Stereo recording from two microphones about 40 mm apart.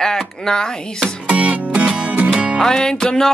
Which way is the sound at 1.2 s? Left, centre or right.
Right.